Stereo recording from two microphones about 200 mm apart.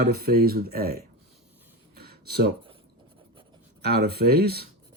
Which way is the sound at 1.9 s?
50° right (ahead or behind).